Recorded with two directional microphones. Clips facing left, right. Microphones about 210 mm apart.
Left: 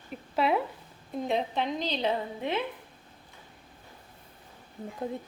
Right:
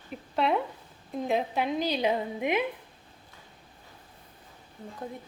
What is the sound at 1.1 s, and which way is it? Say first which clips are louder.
A woman's voice: right 1 dB; centre (ahead or behind).